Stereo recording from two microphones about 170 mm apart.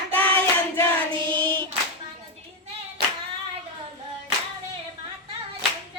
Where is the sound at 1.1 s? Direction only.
30° right (ahead or behind).